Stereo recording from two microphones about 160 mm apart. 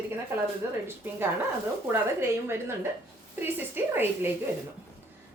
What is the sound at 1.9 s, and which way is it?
Speech, 15° right (ahead or behind).